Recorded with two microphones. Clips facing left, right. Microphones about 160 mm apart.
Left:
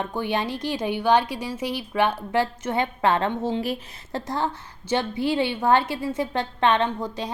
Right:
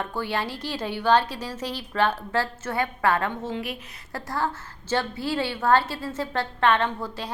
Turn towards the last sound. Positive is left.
turn(degrees=20)  # may be behind; listen again after turning